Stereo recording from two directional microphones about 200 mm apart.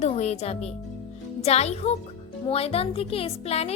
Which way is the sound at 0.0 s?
35° left (ahead or behind).